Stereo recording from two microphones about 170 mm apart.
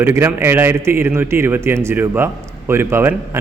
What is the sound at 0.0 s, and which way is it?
A man's voice, 15° right (ahead or behind).